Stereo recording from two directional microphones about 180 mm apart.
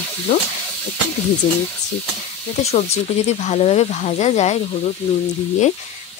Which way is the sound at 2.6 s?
40° left (ahead or behind).